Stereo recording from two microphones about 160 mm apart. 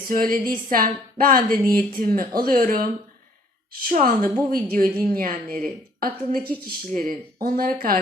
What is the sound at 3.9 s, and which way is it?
A woman's voice, 60° right (ahead or behind).